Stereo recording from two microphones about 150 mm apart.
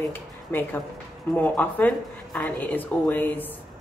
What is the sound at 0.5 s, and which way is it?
Speech, 15° left (ahead or behind).